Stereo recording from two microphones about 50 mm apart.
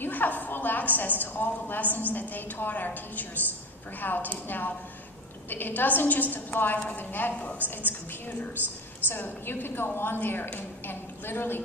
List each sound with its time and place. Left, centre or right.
0.0 s a woman's voice: left